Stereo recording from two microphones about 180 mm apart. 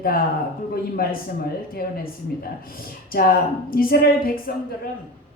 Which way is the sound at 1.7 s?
55° left (ahead or behind).